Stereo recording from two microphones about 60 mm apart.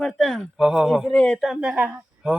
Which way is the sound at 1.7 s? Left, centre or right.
Right.